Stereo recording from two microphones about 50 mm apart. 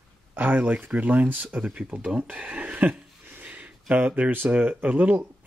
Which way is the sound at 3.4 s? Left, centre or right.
Right.